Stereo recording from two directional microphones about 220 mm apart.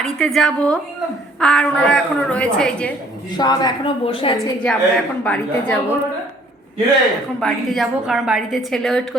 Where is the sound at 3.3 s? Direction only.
20° left (ahead or behind).